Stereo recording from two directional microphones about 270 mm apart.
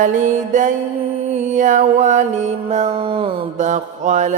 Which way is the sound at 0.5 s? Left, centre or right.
Right.